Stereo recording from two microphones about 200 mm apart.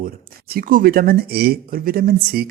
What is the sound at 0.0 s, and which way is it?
Speech, 45° right (ahead or behind).